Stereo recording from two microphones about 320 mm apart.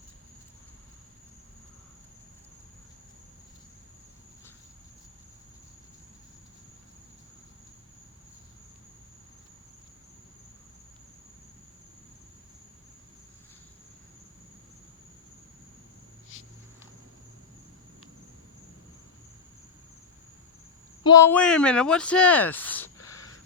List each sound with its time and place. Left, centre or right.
16.3 s walk: left
21.0 s speech: centre
23.0 s a sound: centre